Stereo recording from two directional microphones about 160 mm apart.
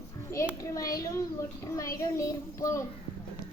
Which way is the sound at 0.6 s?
20° left (ahead or behind).